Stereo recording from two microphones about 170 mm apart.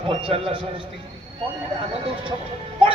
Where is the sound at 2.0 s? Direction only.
30° right (ahead or behind).